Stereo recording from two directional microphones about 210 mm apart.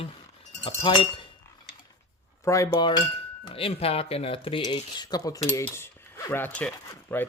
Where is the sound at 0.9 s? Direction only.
20° left (ahead or behind).